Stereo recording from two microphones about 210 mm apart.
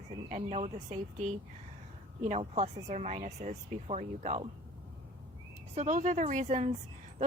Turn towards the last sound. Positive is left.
turn(degrees=-35)  # may be behind; listen again after turning